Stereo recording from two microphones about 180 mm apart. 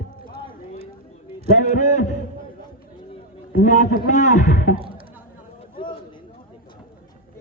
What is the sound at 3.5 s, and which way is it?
A man's voice, 45° left (ahead or behind).